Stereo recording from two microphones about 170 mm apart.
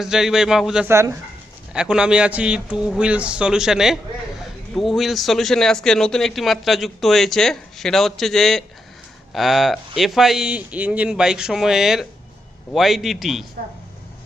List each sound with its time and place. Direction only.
0.0 s a man's voice: 5° right (ahead or behind)
0.9 s speech: 15° right (ahead or behind)
1.7 s a man's voice: 5° right (ahead or behind)